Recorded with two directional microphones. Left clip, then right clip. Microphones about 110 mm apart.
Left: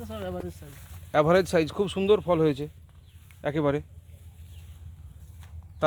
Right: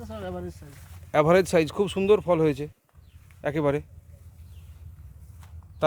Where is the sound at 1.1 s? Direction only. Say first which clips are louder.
Right 2 dB; 55° right (ahead or behind).